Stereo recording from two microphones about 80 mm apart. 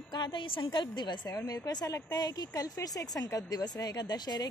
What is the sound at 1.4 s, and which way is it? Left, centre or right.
Speech, left.